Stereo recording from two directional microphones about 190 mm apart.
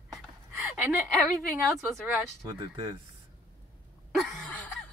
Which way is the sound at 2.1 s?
Centre (ahead or behind).